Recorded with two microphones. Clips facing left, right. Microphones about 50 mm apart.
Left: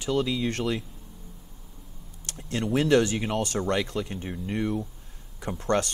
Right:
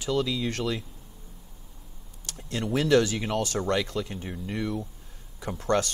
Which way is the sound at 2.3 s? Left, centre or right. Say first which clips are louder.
Left 1 dB; left.